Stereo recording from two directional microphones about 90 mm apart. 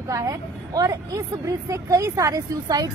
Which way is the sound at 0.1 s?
40° right (ahead or behind).